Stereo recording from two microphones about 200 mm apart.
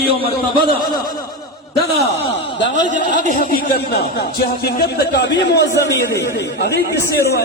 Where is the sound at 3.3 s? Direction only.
50° left (ahead or behind).